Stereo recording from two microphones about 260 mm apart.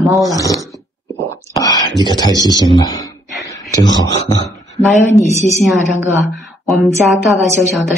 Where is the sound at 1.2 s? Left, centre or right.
Centre.